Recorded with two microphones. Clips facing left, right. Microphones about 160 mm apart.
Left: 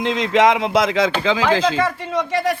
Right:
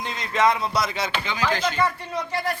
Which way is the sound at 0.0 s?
90° left.